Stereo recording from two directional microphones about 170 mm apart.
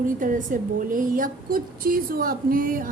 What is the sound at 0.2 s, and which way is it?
A woman's voice, 55° right (ahead or behind).